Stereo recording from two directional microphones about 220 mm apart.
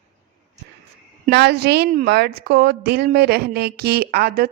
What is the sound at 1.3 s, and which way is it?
A woman's voice, 50° right (ahead or behind).